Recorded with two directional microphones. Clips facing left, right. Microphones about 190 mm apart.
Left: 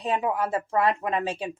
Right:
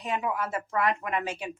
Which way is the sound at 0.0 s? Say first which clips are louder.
Left 4 dB; 30° left (ahead or behind).